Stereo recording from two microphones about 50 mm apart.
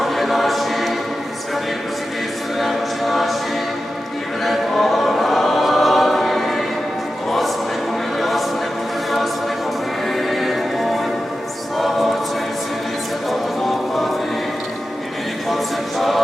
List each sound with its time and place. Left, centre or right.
0.0 s choir: centre
2.6 s a capella: centre
4.4 s choir: centre
7.3 s music: centre
8.2 s choir: centre
10.1 s music: centre
11.8 s choir: centre
13.6 s music: centre
15.4 s a sound: centre